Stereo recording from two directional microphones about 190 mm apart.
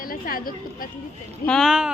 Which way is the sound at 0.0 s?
50° left (ahead or behind).